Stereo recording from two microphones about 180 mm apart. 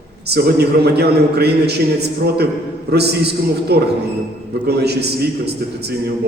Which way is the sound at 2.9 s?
65° right (ahead or behind).